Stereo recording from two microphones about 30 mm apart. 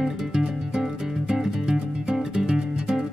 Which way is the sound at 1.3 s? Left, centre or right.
Right.